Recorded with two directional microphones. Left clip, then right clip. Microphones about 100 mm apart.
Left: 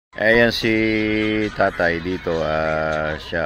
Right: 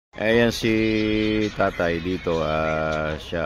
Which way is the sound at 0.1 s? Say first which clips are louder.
Left 4 dB; 20° right (ahead or behind).